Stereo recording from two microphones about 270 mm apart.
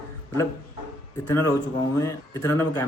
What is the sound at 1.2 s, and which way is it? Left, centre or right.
A man's voice, centre.